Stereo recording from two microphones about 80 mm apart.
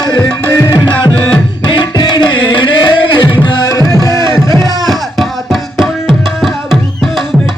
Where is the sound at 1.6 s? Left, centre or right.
Left.